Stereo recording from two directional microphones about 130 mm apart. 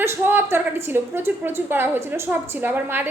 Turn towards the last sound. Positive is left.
turn(degrees=-15)  # may be behind; listen again after turning